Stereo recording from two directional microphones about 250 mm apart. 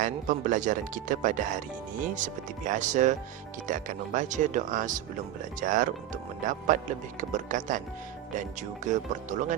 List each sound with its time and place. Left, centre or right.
0.0 s speech: right